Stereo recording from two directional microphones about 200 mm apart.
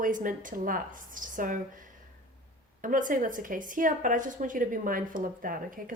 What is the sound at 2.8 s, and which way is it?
A woman's voice, 40° right (ahead or behind).